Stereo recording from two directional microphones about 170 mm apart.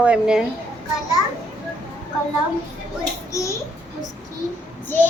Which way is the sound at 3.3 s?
20° left (ahead or behind).